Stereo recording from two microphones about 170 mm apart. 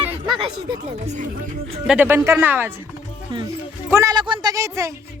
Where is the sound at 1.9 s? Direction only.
10° right (ahead or behind).